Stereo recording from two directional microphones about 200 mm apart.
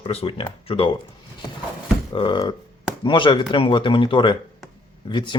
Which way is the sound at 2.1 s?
25° left (ahead or behind).